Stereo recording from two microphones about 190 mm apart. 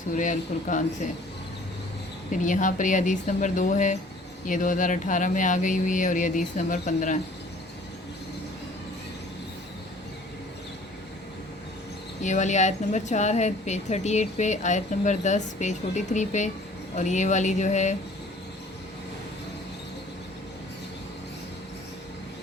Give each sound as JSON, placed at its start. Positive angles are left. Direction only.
{"t": 0.2, "sound": "speech", "side_deg": 40}
{"t": 2.4, "sound": "speech", "side_deg": 40}
{"t": 12.2, "sound": "speech", "side_deg": 40}